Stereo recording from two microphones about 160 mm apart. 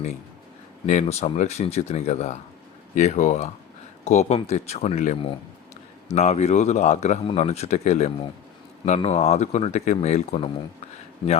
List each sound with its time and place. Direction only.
0.9 s a man's voice: 45° left (ahead or behind)